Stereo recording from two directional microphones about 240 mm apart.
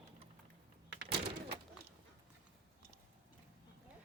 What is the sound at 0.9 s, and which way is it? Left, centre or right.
Door, right.